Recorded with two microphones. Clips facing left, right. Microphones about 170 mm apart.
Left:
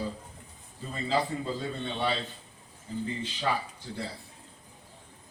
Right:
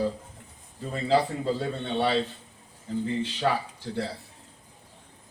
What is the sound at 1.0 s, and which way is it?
A man's voice, 70° right (ahead or behind).